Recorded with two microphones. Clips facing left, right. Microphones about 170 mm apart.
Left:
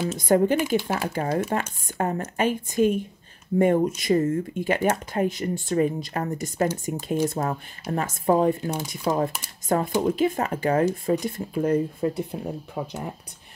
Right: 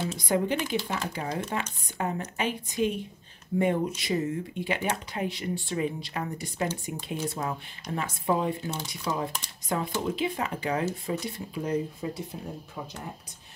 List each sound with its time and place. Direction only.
0.2 s speech: 50° left (ahead or behind)